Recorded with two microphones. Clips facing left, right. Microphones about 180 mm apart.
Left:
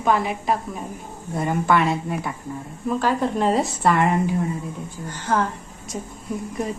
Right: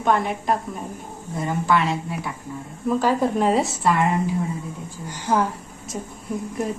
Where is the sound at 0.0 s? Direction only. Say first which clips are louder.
Even; centre (ahead or behind).